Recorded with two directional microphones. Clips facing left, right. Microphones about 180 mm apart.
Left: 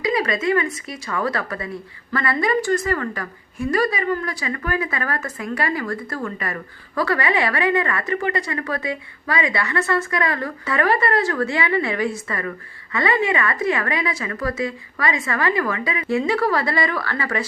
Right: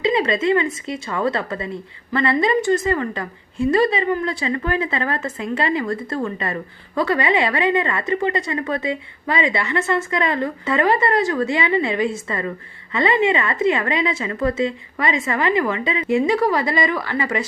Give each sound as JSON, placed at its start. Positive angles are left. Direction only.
{"t": 0.0, "sound": "a woman's voice", "side_deg": -25}